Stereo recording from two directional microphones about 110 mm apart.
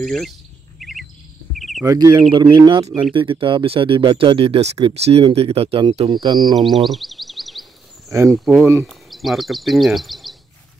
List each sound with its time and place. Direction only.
0.0 s speech: 5° left (ahead or behind)
0.7 s chirp: centre (ahead or behind)
1.5 s cricket: centre (ahead or behind)
1.9 s speech: 30° right (ahead or behind)
2.3 s speech: 40° right (ahead or behind)
6.1 s speech: 40° right (ahead or behind)
6.5 s a sound: centre (ahead or behind)
8.1 s speech: 25° right (ahead or behind)
8.8 s speech: centre (ahead or behind)